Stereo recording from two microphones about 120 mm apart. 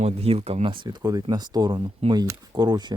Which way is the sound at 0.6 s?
40° right (ahead or behind).